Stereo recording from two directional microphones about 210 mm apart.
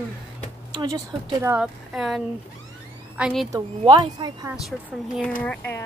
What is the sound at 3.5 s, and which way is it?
Speech, 20° right (ahead or behind).